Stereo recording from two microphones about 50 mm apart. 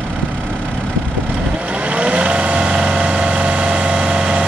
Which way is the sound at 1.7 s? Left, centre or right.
Right.